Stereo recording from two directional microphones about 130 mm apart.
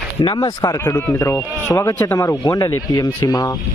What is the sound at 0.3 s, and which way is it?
Speech, 25° left (ahead or behind).